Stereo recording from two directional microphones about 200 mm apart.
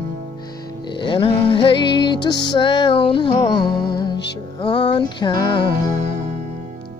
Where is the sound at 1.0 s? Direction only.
25° left (ahead or behind).